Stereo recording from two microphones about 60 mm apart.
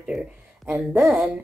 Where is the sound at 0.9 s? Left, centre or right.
Centre.